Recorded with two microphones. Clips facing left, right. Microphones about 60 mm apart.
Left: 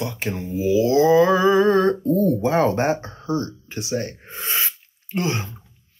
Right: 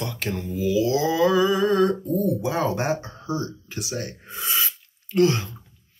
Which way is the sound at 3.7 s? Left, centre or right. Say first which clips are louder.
Left 5 dB; left.